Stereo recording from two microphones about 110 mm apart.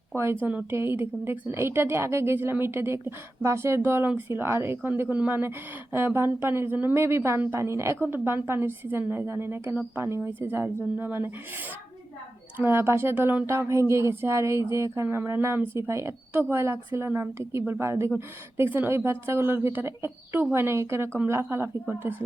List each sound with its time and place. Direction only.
0.1 s a woman's voice: 20° right (ahead or behind)
12.5 s speech: 15° right (ahead or behind)